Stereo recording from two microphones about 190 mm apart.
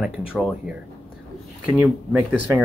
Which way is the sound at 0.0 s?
Centre (ahead or behind).